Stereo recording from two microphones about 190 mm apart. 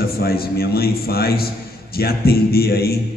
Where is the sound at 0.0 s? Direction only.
55° left (ahead or behind).